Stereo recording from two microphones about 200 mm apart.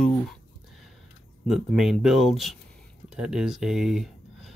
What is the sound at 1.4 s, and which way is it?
Speech, centre (ahead or behind).